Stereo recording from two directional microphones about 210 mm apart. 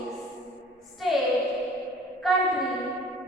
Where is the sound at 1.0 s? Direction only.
Centre (ahead or behind).